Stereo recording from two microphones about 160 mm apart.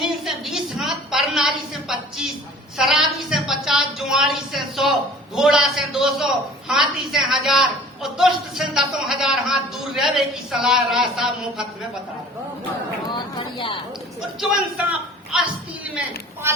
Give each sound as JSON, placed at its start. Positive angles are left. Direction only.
{"t": 0.0, "sound": "a sound", "side_deg": 0}
{"t": 2.7, "sound": "a woman's voice", "side_deg": -5}
{"t": 13.1, "sound": "chatter", "side_deg": 30}
{"t": 14.2, "sound": "a man's voice", "side_deg": -5}